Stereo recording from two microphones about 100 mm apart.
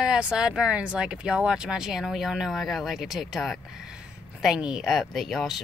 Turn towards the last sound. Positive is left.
turn(degrees=0)  # may be behind; listen again after turning